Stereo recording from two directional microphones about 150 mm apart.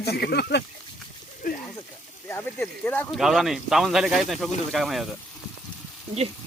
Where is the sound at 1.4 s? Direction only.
60° left (ahead or behind).